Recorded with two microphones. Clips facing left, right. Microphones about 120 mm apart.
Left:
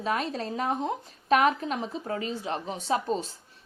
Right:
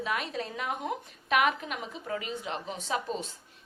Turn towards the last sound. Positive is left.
turn(degrees=35)  # may be behind; listen again after turning